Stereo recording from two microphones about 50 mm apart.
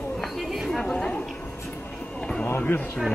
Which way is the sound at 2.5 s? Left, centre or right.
Left.